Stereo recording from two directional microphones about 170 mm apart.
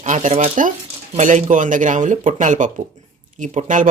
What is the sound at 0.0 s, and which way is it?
Speech, 50° right (ahead or behind).